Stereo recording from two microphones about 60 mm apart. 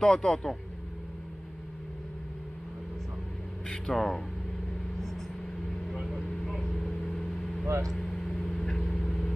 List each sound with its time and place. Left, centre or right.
0.0 s speech: centre
3.6 s a sound: centre
3.9 s speech: centre
6.0 s vehicle: centre
7.6 s speech: right
8.3 s vehicle: centre